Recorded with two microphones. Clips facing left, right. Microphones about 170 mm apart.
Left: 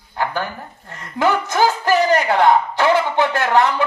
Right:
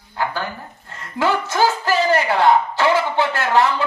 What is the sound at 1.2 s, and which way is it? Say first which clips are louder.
Music: left 1 dB; 15° left (ahead or behind).